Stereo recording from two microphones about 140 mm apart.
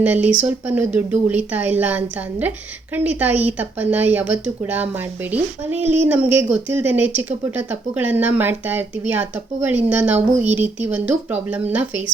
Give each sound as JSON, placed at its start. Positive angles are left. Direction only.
{"t": 0.0, "sound": "speech", "side_deg": -10}